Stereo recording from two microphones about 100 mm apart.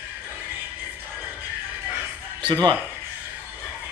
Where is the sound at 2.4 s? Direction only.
50° right (ahead or behind).